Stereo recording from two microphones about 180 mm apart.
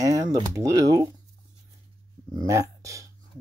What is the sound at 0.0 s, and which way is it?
Speech, 20° right (ahead or behind).